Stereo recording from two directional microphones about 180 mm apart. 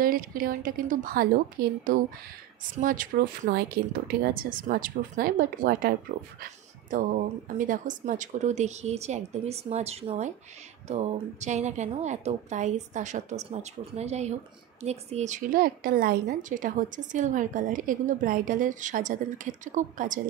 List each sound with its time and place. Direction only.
0.0 s a woman's voice: 50° right (ahead or behind)